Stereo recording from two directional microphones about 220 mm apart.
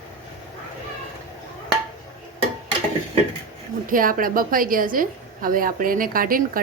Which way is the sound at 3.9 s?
40° right (ahead or behind).